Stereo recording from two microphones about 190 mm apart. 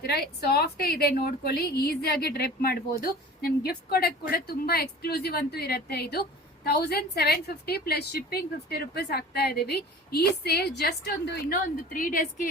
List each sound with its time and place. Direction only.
0.0 s a woman's voice: 55° left (ahead or behind)